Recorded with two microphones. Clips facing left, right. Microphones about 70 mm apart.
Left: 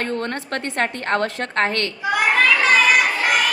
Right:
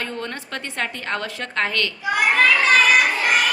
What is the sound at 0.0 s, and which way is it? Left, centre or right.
A woman's voice, left.